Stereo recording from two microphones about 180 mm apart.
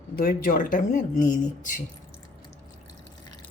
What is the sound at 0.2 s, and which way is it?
Speech, 55° left (ahead or behind).